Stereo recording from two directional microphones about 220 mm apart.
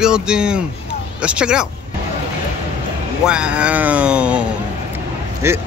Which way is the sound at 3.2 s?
5° right (ahead or behind).